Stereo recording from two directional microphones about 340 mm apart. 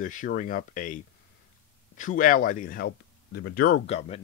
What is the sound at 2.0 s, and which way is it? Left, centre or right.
Speech, left.